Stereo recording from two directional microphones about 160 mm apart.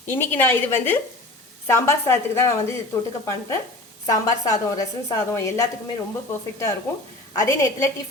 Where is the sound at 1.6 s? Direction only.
15° left (ahead or behind).